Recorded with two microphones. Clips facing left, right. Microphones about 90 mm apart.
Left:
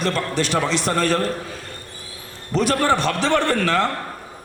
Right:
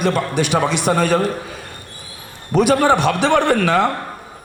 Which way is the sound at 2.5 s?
15° right (ahead or behind).